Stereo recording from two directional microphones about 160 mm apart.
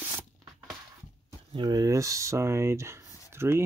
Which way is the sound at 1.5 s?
25° right (ahead or behind).